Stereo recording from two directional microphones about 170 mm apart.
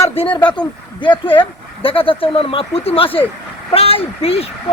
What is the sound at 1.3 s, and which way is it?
Speech, 30° left (ahead or behind).